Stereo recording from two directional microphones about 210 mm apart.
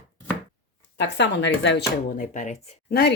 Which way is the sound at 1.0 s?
60° left (ahead or behind).